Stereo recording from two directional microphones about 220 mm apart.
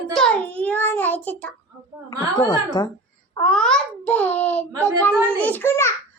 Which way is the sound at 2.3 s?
15° left (ahead or behind).